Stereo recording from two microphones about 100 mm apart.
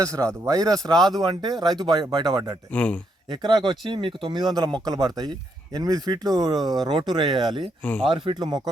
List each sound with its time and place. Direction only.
0.0 s speech: 35° right (ahead or behind)
2.7 s speech: 15° left (ahead or behind)
3.2 s speech: 50° right (ahead or behind)
7.8 s speech: 15° left (ahead or behind)
8.0 s speech: 55° right (ahead or behind)